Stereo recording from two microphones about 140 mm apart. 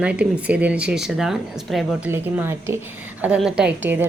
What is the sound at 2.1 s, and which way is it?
Speech, 15° right (ahead or behind).